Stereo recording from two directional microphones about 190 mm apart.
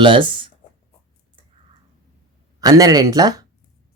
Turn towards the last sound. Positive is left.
turn(degrees=-20)  # may be behind; listen again after turning